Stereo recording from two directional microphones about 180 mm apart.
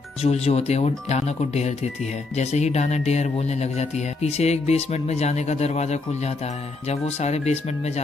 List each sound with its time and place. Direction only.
0.2 s speech: 35° left (ahead or behind)